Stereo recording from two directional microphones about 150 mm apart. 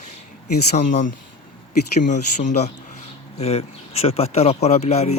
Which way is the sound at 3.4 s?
45° left (ahead or behind).